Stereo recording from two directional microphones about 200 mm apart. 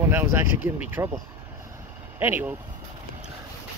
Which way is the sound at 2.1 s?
10° right (ahead or behind).